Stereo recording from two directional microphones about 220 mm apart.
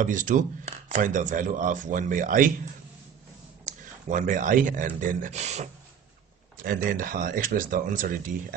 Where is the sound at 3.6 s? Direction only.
35° right (ahead or behind).